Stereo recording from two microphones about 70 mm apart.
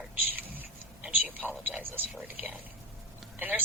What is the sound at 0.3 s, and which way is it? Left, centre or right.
Whispering, right.